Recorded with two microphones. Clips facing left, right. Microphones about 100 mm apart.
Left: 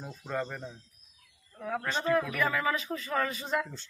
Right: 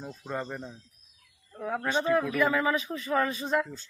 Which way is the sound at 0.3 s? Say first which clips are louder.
Left 1 dB; 10° right (ahead or behind).